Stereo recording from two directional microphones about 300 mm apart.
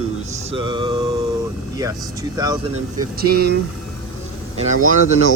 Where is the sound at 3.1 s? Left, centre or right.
Right.